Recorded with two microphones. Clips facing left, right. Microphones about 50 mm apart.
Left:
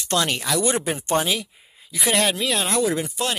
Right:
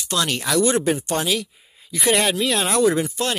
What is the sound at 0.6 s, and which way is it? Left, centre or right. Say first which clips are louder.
Speech: right 7 dB; centre.